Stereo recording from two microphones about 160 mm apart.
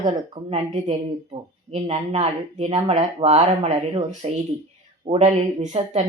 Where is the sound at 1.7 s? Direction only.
40° right (ahead or behind).